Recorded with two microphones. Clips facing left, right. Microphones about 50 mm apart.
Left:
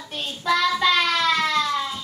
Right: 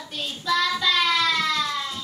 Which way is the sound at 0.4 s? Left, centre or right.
Left.